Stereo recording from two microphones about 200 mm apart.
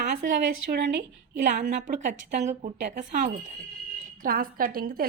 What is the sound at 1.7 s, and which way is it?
A woman's voice, 40° right (ahead or behind).